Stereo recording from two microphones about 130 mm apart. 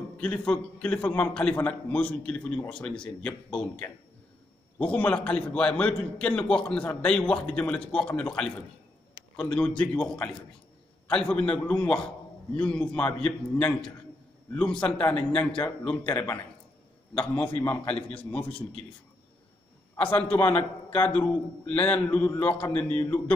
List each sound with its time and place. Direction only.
0.2 s a man's voice: 10° left (ahead or behind)
17.1 s a man's voice: 10° left (ahead or behind)
20.0 s a man's voice: 15° left (ahead or behind)